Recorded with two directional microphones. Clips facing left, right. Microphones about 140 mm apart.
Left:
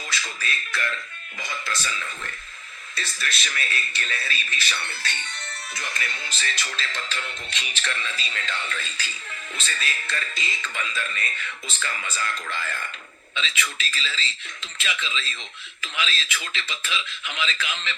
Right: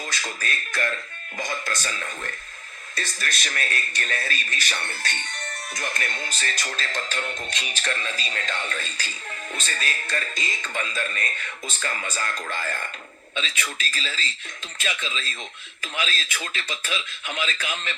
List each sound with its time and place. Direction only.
0.1 s speech: 45° right (ahead or behind)